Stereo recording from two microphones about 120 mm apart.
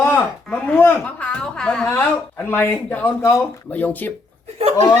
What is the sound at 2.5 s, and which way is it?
A man's voice, 20° left (ahead or behind).